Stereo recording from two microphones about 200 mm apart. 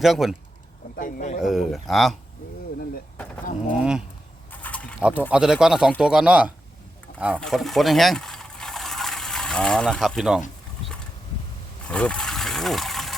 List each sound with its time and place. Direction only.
0.0 s speech: centre (ahead or behind)
0.9 s speech: 40° left (ahead or behind)
1.4 s speech: centre (ahead or behind)
3.7 s speech: 5° right (ahead or behind)
4.6 s pulleys: 5° left (ahead or behind)
4.9 s speech: 5° right (ahead or behind)
7.3 s a sound: centre (ahead or behind)
11.9 s a sound: 5° left (ahead or behind)